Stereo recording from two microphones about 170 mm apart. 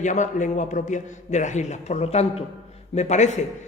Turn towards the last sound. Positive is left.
turn(degrees=45)  # may be behind; listen again after turning